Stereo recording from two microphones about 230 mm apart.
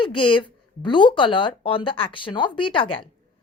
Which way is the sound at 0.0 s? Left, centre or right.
Left.